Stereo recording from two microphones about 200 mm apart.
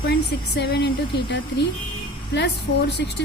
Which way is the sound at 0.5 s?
60° left (ahead or behind).